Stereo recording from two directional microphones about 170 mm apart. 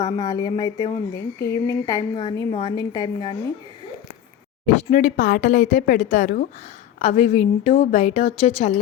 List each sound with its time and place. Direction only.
0.0 s a woman's voice: 20° left (ahead or behind)
4.8 s a woman's voice: 50° left (ahead or behind)